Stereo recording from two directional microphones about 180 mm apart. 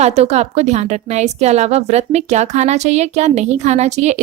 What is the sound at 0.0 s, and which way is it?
Speech, 35° right (ahead or behind).